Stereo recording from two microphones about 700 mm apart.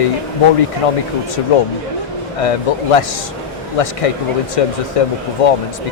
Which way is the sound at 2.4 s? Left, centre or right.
Left.